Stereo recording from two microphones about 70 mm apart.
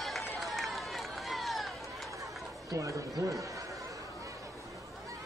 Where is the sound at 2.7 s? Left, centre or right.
Right.